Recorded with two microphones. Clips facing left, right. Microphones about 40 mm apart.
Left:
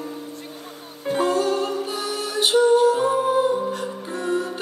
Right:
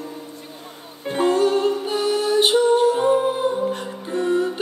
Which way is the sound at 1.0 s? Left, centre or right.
Right.